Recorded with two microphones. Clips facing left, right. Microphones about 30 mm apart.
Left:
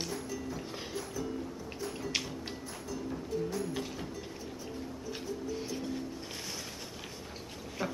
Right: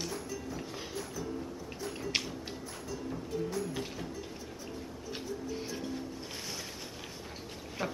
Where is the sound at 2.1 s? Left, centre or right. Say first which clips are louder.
Right 2 dB; centre.